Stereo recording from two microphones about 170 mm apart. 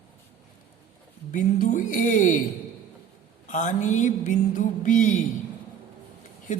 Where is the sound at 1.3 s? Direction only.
45° left (ahead or behind).